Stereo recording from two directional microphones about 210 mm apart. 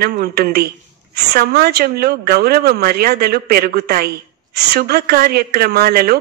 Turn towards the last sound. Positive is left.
turn(degrees=-45)  # may be behind; listen again after turning